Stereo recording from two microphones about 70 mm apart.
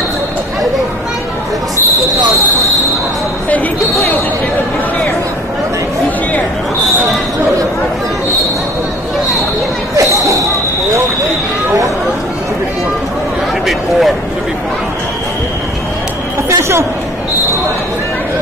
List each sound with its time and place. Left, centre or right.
9.9 s a sound: right
13.7 s vehicle: centre
16.4 s chatter: right